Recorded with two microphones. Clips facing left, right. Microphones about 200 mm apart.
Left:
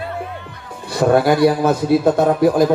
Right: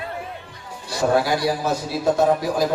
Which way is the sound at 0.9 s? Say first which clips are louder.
Left 6 dB; 55° left (ahead or behind).